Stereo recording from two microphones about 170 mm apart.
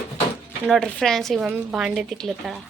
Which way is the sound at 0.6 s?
Centre (ahead or behind).